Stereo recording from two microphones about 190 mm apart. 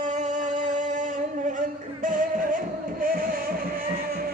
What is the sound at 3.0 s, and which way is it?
Music, 50° right (ahead or behind).